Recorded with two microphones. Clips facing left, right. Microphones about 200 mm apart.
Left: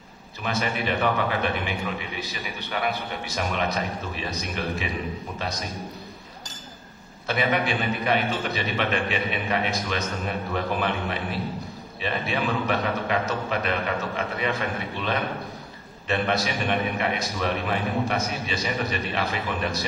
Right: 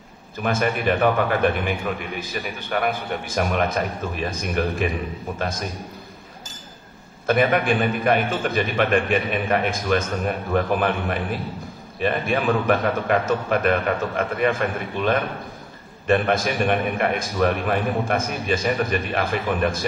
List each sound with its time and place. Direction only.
0.4 s a man's voice: 50° right (ahead or behind)
7.2 s a man's voice: 50° right (ahead or behind)